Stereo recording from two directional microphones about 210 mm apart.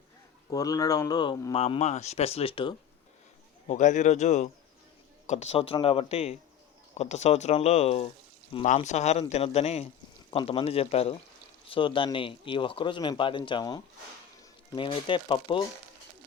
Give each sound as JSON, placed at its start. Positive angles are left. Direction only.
{"t": 0.5, "sound": "speech", "side_deg": 15}
{"t": 1.5, "sound": "speech", "side_deg": 30}
{"t": 3.7, "sound": "speech", "side_deg": 35}